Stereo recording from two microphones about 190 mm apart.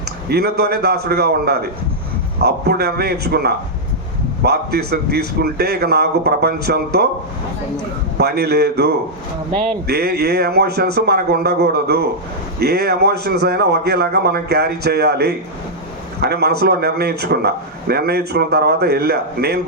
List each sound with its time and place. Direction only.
0.3 s a man's voice: 55° right (ahead or behind)
8.2 s a man's voice: 55° right (ahead or behind)